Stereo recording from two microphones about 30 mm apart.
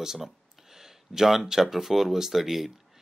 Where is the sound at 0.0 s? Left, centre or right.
Centre.